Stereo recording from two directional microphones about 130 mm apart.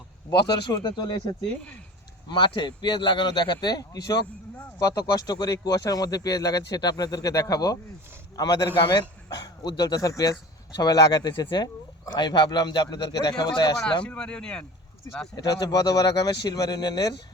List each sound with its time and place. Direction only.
0.3 s speech: 30° left (ahead or behind)
2.3 s speech: 35° left (ahead or behind)
14.0 s speech: 10° left (ahead or behind)
15.6 s speech: 30° left (ahead or behind)